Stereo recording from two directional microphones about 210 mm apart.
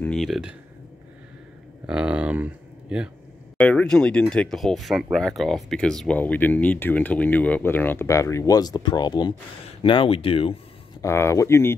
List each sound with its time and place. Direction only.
0.0 s speech: centre (ahead or behind)
1.9 s speech: 5° right (ahead or behind)
3.5 s speech: 5° left (ahead or behind); by 10.5 s 25° left (ahead or behind)
11.0 s speech: 10° left (ahead or behind)